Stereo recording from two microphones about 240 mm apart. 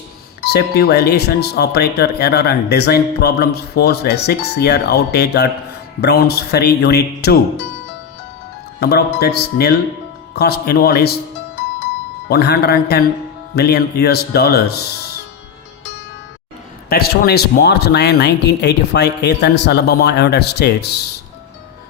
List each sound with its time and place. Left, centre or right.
0.4 s speech: left
8.8 s speech: left
12.3 s speech: left
16.9 s speech: left